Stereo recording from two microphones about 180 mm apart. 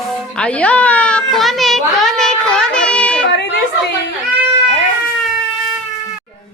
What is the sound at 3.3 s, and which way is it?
Speech, 70° left (ahead or behind).